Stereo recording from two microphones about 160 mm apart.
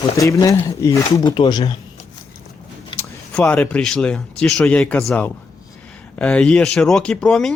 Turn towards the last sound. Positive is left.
turn(degrees=5)  # may be behind; listen again after turning